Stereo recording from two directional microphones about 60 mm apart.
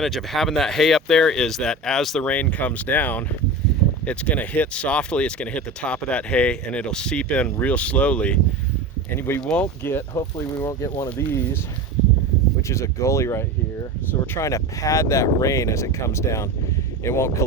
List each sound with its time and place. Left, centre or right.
0.0 s speech: centre
2.2 s speech: left
9.1 s speech: left
10.7 s speech: left
11.3 s speech: left
12.6 s speech: left